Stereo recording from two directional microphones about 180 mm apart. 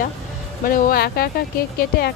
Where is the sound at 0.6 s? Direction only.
50° left (ahead or behind).